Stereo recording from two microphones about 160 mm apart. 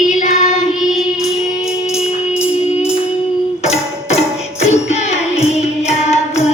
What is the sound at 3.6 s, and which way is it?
Music, 40° left (ahead or behind).